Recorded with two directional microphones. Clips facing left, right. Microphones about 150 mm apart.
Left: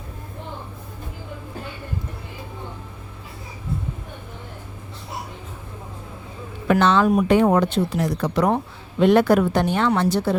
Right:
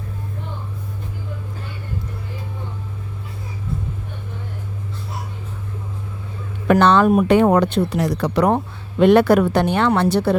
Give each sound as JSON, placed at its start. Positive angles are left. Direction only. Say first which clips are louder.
{"t": 6.7, "sound": "speech", "louder": "right 3 dB", "side_deg": -60}